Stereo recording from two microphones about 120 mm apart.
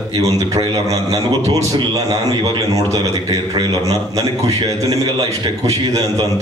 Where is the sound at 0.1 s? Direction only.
30° right (ahead or behind).